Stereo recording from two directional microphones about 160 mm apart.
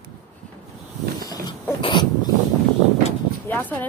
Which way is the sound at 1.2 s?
25° left (ahead or behind).